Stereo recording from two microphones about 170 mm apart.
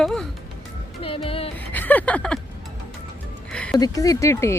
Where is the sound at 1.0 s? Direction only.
35° left (ahead or behind).